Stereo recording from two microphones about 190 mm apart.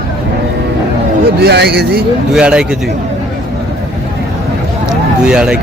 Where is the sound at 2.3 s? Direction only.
5° right (ahead or behind).